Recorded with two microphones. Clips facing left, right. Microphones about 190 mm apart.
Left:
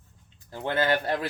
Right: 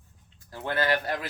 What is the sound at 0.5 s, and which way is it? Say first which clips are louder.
Speech: left 2 dB; 20° left (ahead or behind).